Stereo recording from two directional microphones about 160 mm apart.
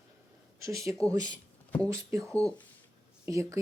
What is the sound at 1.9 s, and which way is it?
Speech, 20° right (ahead or behind).